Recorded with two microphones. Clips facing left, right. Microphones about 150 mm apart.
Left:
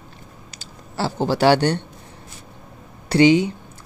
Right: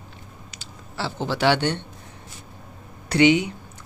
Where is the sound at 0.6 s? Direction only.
40° left (ahead or behind).